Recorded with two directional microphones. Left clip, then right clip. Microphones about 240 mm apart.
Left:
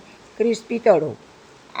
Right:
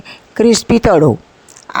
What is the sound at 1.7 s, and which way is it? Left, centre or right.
Pig, right.